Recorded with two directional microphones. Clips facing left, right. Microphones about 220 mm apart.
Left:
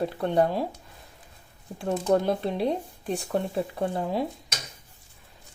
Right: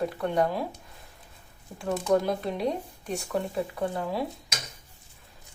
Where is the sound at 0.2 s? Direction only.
30° left (ahead or behind).